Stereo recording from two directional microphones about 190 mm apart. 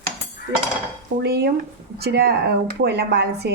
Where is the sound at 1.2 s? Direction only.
55° right (ahead or behind).